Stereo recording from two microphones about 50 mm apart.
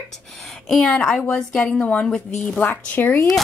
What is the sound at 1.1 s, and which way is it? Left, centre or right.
A woman's voice, left.